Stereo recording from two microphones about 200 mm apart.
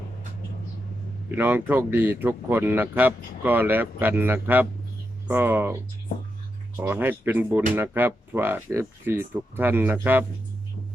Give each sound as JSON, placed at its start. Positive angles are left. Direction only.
{"t": 1.4, "sound": "speech", "side_deg": -10}
{"t": 6.7, "sound": "speech", "side_deg": -10}